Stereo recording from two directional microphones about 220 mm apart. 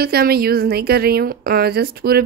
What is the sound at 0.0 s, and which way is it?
A woman's voice, 45° right (ahead or behind).